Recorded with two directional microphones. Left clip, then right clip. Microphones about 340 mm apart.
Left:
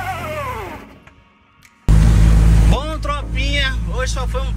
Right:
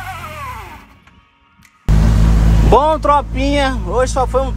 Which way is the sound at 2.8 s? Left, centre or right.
Right.